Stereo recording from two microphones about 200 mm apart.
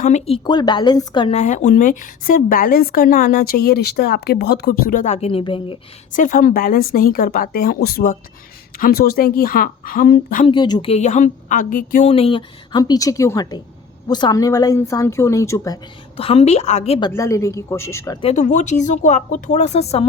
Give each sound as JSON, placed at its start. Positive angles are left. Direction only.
{"t": 0.0, "sound": "a woman's voice", "side_deg": 30}
{"t": 1.4, "sound": "speech", "side_deg": 35}
{"t": 6.1, "sound": "speech", "side_deg": 40}
{"t": 10.4, "sound": "a woman's voice", "side_deg": 25}
{"t": 16.1, "sound": "speech", "side_deg": 30}
{"t": 17.1, "sound": "a woman's voice", "side_deg": 15}
{"t": 18.2, "sound": "speech", "side_deg": 35}